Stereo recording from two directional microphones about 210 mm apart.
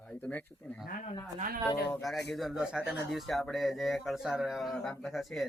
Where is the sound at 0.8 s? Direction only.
35° left (ahead or behind).